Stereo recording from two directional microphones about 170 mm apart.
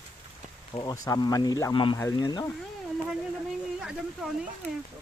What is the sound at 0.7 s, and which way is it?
Speech, 20° left (ahead or behind).